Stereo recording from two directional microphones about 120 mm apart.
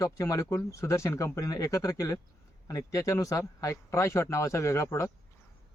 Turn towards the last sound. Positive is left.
turn(degrees=25)  # may be behind; listen again after turning